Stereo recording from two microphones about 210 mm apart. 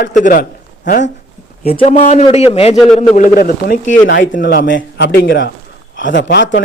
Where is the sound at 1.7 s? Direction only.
30° left (ahead or behind); by 6.6 s 55° left (ahead or behind).